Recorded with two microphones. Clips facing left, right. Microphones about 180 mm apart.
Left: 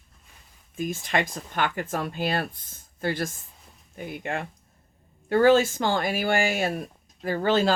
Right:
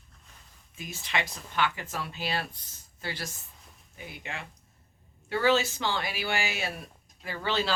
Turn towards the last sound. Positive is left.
turn(degrees=45)  # may be behind; listen again after turning